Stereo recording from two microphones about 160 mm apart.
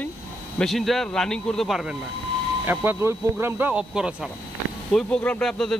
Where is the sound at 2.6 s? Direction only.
15° right (ahead or behind).